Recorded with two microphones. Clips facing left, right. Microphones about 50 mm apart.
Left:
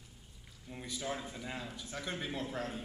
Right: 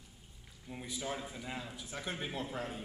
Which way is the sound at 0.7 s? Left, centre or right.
Centre.